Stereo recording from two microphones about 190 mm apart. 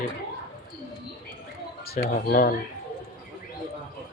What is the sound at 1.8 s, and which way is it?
Speech, 50° left (ahead or behind).